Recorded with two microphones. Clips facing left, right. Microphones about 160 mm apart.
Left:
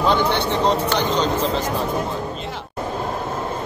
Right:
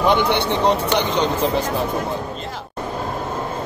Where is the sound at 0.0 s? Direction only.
15° right (ahead or behind).